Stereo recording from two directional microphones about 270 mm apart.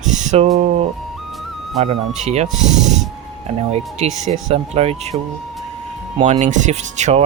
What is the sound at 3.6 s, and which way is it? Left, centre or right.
Speech, right.